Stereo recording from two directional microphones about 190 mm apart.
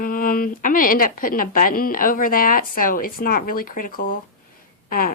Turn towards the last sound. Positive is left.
turn(degrees=50)  # may be behind; listen again after turning